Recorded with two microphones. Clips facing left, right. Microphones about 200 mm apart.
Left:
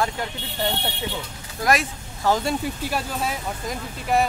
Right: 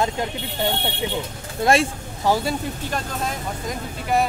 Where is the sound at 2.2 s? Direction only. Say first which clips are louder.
Right 1 dB; 10° right (ahead or behind).